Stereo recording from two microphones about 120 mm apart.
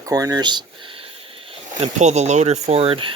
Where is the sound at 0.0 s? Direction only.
30° right (ahead or behind).